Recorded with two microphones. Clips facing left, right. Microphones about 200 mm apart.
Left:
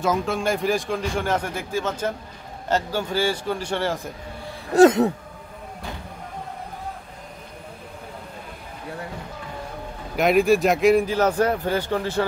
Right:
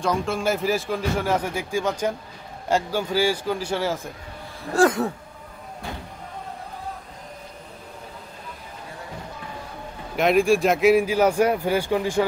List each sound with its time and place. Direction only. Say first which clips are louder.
0.0 s a man's voice: left 1 dB; centre (ahead or behind)
4.7 s a sound: left 5 dB; 20° left (ahead or behind)
10.1 s speech: left 1 dB; centre (ahead or behind)